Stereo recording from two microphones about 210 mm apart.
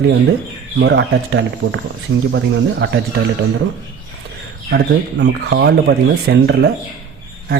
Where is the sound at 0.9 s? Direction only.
60° right (ahead or behind).